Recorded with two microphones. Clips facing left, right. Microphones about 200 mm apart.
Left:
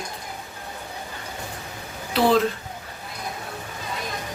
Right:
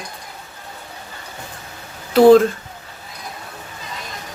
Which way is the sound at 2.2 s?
45° right (ahead or behind).